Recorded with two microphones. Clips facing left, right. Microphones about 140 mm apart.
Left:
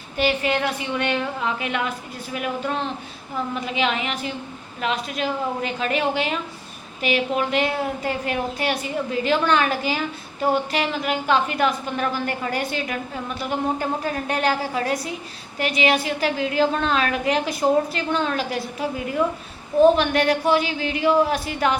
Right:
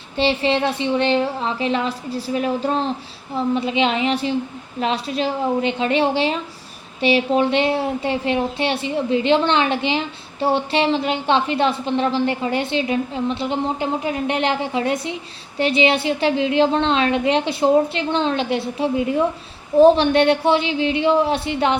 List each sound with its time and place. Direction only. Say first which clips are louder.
0.2 s a woman's voice: right 3 dB; 25° right (ahead or behind)